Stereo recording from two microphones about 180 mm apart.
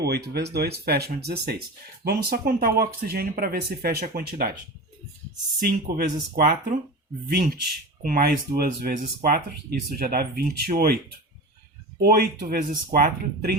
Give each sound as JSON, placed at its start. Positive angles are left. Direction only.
{"t": 0.0, "sound": "speech", "side_deg": -65}
{"t": 5.5, "sound": "speech", "side_deg": -55}
{"t": 11.9, "sound": "speech", "side_deg": -55}